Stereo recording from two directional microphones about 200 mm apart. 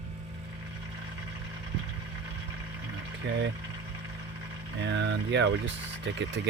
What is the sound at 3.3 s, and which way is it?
Speech, 65° right (ahead or behind).